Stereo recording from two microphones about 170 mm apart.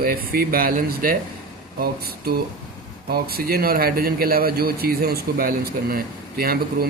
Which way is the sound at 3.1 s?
65° right (ahead or behind).